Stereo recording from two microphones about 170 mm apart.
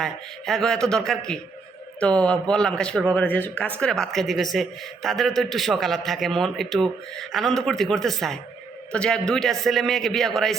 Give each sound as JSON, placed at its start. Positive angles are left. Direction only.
{"t": 0.0, "sound": "speech", "side_deg": 0}